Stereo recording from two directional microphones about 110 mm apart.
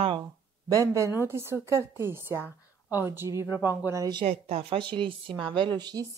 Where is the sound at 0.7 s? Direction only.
30° right (ahead or behind).